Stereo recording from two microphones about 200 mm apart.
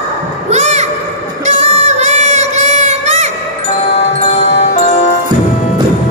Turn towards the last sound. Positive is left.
turn(degrees=40)  # may be behind; listen again after turning